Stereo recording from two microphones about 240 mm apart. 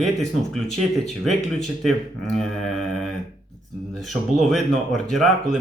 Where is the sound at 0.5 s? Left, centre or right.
Centre.